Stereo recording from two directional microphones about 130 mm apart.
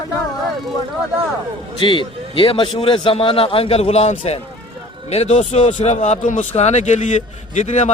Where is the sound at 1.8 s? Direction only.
40° left (ahead or behind).